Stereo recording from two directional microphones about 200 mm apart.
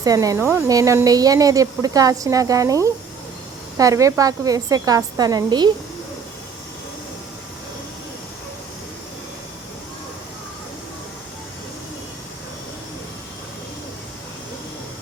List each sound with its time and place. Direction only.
0.0 s a woman's voice: 15° right (ahead or behind)